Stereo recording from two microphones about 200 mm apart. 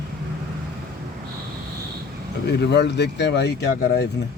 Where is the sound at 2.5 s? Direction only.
55° left (ahead or behind).